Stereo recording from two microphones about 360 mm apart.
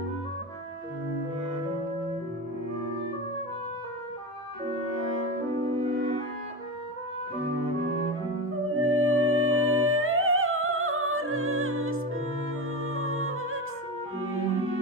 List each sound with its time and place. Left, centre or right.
5.8 s music: right
8.7 s music: right